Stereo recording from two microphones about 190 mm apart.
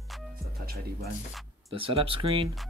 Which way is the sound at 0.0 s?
Centre (ahead or behind).